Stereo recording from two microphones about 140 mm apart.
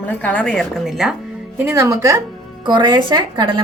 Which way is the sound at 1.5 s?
20° right (ahead or behind).